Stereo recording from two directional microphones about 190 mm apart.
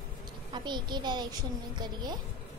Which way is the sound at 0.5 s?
25° right (ahead or behind).